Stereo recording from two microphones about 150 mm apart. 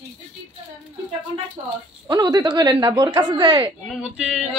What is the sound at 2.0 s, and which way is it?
Speech, 25° right (ahead or behind).